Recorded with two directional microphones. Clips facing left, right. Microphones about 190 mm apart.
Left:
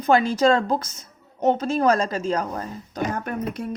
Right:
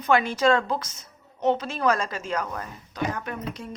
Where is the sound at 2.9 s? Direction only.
50° left (ahead or behind).